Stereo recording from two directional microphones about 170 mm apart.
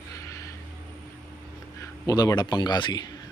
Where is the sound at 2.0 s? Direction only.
20° left (ahead or behind).